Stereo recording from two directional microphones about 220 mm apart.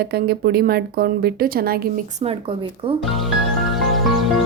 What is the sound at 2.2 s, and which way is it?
Speech, 25° right (ahead or behind).